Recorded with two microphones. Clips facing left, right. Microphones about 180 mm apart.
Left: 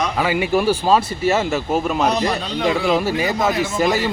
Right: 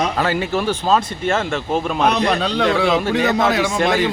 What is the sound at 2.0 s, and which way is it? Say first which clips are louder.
Speech: right 2 dB; 60° right (ahead or behind).